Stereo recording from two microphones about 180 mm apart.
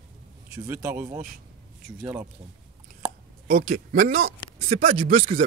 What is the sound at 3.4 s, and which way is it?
Speech, 40° right (ahead or behind).